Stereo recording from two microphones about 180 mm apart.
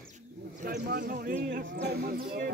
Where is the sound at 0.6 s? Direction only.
55° right (ahead or behind).